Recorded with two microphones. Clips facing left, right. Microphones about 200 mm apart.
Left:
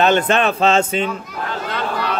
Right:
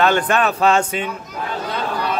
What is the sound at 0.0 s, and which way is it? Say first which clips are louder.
Speech: left 1 dB; 25° left (ahead or behind).